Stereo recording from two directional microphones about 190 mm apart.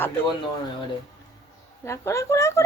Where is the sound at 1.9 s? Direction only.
15° left (ahead or behind).